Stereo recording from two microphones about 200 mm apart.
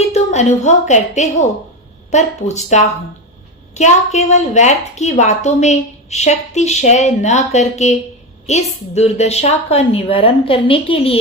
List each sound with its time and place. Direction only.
0.0 s a woman's voice: 30° left (ahead or behind)